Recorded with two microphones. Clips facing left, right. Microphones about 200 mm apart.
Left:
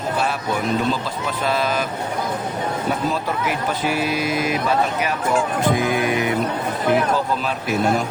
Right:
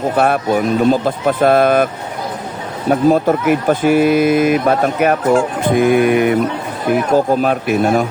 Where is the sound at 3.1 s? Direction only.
50° right (ahead or behind).